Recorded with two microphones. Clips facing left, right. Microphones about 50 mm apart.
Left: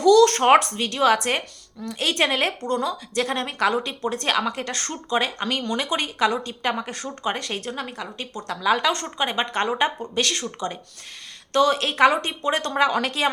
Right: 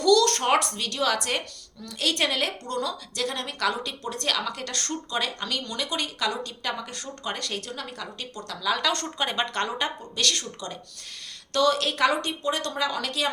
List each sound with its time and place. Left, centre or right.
0.0 s a sound: left
0.6 s a woman's voice: left
7.3 s a woman's voice: left
8.4 s speech: left
8.8 s a woman's voice: centre; by 13.3 s left